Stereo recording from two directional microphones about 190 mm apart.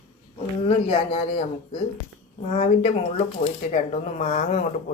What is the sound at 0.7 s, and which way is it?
A woman's voice, 30° left (ahead or behind).